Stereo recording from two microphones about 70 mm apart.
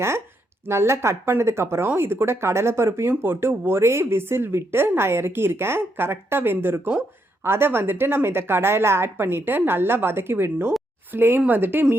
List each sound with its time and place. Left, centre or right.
0.7 s speech: right